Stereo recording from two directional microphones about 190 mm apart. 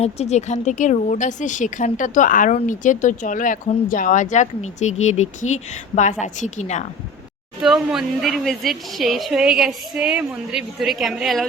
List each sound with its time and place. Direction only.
0.0 s speech: 35° left (ahead or behind)
7.6 s speech: centre (ahead or behind)